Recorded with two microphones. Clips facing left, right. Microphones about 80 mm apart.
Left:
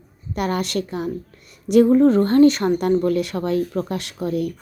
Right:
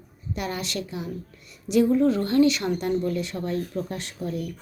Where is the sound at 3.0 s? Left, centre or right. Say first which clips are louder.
Left 7 dB; left.